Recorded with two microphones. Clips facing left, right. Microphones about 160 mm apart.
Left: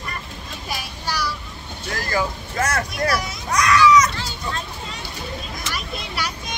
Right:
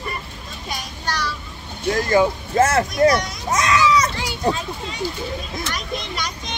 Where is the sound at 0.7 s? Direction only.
5° left (ahead or behind).